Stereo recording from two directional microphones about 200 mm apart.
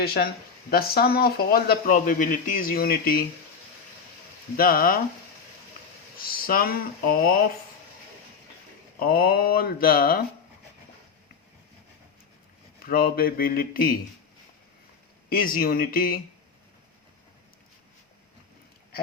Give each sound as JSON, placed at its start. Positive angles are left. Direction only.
{"t": 0.0, "sound": "speech", "side_deg": 50}
{"t": 4.5, "sound": "speech", "side_deg": 45}
{"t": 6.1, "sound": "speech", "side_deg": 45}
{"t": 9.0, "sound": "speech", "side_deg": 50}
{"t": 12.8, "sound": "speech", "side_deg": 50}
{"t": 15.3, "sound": "speech", "side_deg": 45}